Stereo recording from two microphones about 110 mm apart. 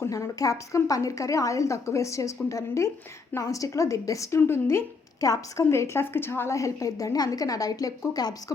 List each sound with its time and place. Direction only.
0.0 s a woman's voice: 25° left (ahead or behind)